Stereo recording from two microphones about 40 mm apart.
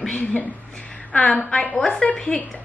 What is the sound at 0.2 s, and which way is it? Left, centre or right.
A woman's voice, left.